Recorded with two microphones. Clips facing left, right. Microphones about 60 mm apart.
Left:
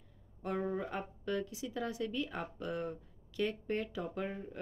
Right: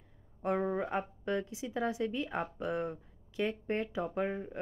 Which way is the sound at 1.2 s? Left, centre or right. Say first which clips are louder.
Right 2 dB; right.